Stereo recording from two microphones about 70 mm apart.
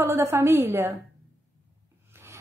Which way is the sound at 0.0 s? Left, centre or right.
Right.